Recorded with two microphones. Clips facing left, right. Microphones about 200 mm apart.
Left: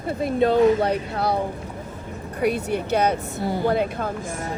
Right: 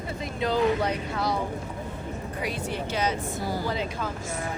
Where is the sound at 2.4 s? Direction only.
60° left (ahead or behind).